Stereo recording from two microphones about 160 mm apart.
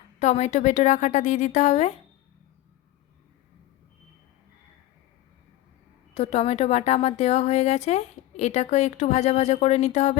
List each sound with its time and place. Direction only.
0.2 s a woman's voice: 45° left (ahead or behind)
6.1 s a woman's voice: 40° left (ahead or behind)